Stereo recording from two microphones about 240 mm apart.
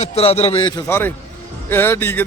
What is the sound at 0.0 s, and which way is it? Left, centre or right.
A man's voice, left.